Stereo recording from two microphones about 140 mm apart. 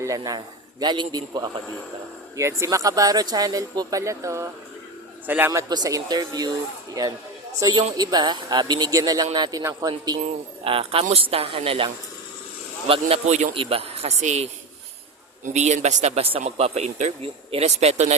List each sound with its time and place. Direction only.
0.0 s a man's voice: 25° right (ahead or behind)
5.5 s speech: 30° right (ahead or behind)
10.6 s speech: 40° right (ahead or behind)
12.9 s speech: 50° right (ahead or behind)
13.5 s speech: 40° right (ahead or behind)